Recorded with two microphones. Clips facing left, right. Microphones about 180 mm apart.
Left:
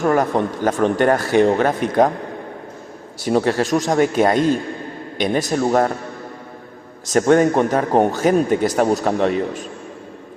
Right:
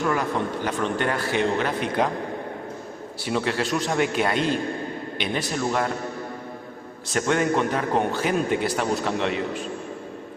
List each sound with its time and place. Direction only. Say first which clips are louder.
0.0 s a man's voice: left 7 dB; 45° left (ahead or behind)
3.2 s a man's voice: left 7 dB; 45° left (ahead or behind)
7.1 s a man's voice: left 8 dB; 40° left (ahead or behind)